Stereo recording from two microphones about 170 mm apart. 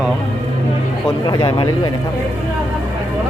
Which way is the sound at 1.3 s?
25° left (ahead or behind).